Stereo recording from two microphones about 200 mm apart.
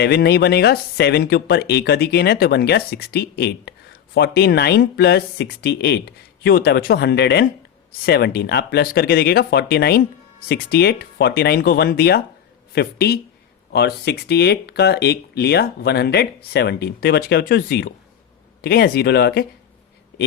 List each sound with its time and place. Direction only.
0.0 s speech: 55° left (ahead or behind)